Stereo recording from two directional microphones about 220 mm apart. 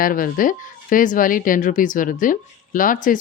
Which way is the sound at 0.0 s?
40° left (ahead or behind).